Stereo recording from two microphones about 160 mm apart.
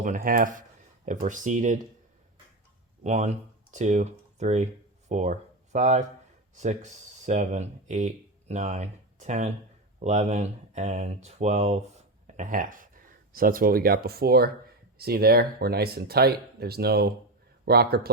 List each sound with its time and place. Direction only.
0.0 s speech: 60° right (ahead or behind)
3.0 s speech: 45° right (ahead or behind); by 18.1 s 75° right (ahead or behind)